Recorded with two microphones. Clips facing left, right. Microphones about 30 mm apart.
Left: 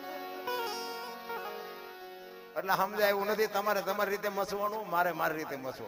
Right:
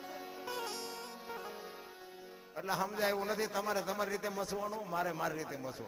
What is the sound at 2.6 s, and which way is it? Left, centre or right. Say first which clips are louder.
A man's voice: left 6 dB; left.